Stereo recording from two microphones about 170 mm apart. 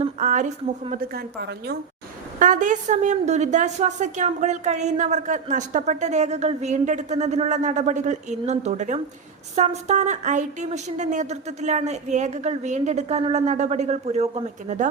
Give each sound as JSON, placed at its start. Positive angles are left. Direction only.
{"t": 0.2, "sound": "a woman's voice", "side_deg": -50}
{"t": 1.1, "sound": "a woman's voice", "side_deg": -75}
{"t": 2.4, "sound": "a woman's voice", "side_deg": -50}